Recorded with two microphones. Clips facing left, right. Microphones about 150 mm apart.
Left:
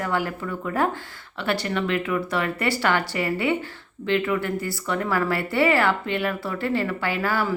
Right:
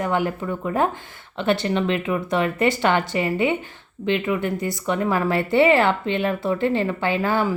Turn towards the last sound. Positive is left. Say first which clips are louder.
# right 3 dB
turn(degrees=-20)  # may be behind; listen again after turning